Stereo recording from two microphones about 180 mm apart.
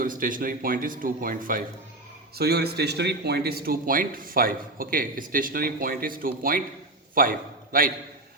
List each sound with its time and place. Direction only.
0.0 s speech: 50° right (ahead or behind)
2.3 s a man's voice: 60° right (ahead or behind)